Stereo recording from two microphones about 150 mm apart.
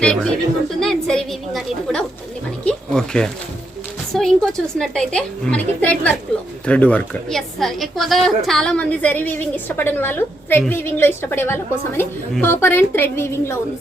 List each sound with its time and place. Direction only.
0.0 s a woman's voice: 5° left (ahead or behind)